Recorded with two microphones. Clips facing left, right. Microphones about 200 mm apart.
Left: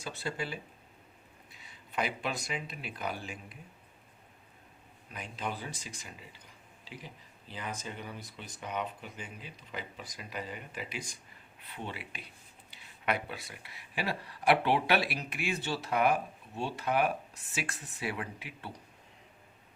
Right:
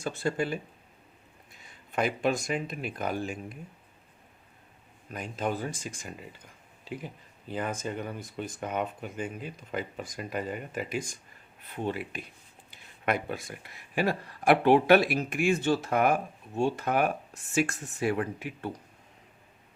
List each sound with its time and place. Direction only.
0.0 s speech: 50° right (ahead or behind)
5.1 s speech: 45° right (ahead or behind)